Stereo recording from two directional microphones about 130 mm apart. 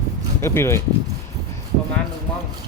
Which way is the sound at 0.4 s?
20° left (ahead or behind).